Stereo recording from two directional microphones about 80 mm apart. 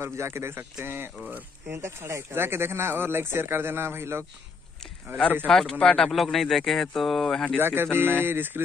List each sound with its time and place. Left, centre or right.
0.0 s speech: right
5.5 s a man's voice: centre
7.5 s speech: right